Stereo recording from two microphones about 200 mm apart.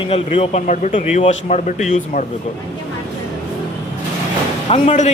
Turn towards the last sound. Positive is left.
turn(degrees=35)  # may be behind; listen again after turning